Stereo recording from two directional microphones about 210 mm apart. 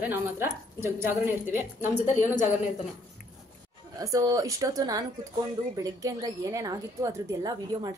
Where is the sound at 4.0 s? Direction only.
15° right (ahead or behind).